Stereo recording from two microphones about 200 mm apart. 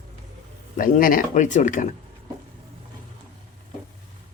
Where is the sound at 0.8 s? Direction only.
45° left (ahead or behind).